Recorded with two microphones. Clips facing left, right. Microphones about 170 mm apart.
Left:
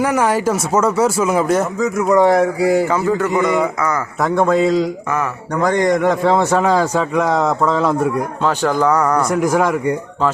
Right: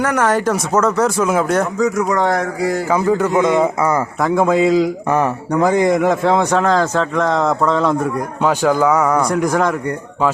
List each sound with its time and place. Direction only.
0.0 s speech: 10° left (ahead or behind)
2.9 s a man's voice: 15° right (ahead or behind)
4.2 s a man's voice: centre (ahead or behind)
8.4 s speech: 10° right (ahead or behind)
9.4 s a man's voice: 5° left (ahead or behind)